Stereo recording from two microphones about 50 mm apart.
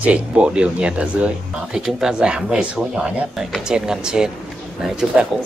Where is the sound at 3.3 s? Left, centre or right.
Centre.